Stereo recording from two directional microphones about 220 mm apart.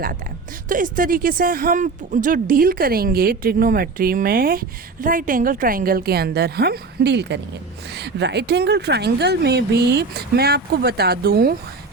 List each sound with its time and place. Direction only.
0.7 s speech: 40° right (ahead or behind)